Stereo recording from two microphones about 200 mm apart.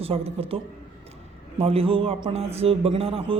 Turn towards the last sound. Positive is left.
turn(degrees=-30)  # may be behind; listen again after turning